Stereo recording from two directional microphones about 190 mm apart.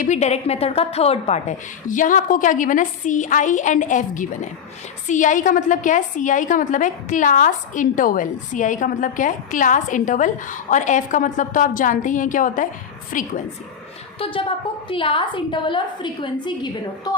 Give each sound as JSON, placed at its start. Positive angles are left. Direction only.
{"t": 0.0, "sound": "a woman's voice", "side_deg": 40}
{"t": 14.2, "sound": "a woman's voice", "side_deg": 30}